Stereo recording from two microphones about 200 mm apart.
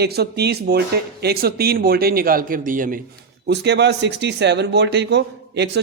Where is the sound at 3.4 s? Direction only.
60° right (ahead or behind).